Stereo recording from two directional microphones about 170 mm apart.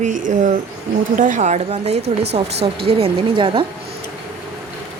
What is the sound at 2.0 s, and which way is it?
Speech, 75° right (ahead or behind).